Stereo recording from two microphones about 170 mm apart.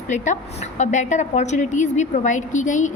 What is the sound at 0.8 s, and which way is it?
A woman's voice, 45° left (ahead or behind).